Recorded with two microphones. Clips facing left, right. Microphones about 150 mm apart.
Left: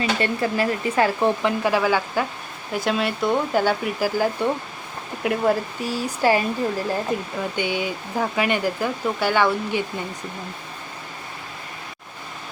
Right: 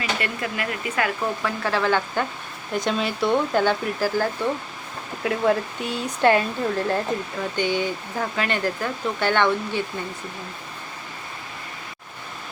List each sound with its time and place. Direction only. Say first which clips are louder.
0.0 s speech: left 5 dB; 30° left (ahead or behind)
1.4 s speech: left 4 dB; 15° left (ahead or behind)